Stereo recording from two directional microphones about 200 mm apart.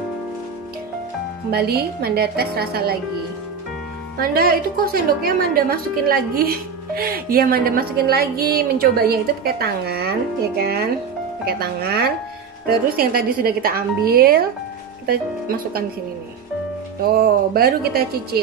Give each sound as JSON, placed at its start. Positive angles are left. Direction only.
{"t": 1.5, "sound": "a woman's voice", "side_deg": -50}
{"t": 4.2, "sound": "a woman's voice", "side_deg": -50}
{"t": 17.6, "sound": "a woman's voice", "side_deg": -50}